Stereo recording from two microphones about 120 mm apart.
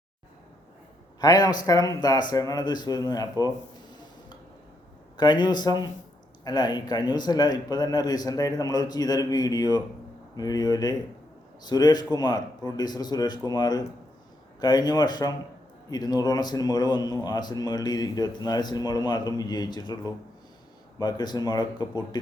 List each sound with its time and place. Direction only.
1.2 s speech: 35° left (ahead or behind)
5.1 s speech: 35° left (ahead or behind)